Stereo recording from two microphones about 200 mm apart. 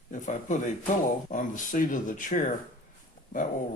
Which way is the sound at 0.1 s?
40° left (ahead or behind).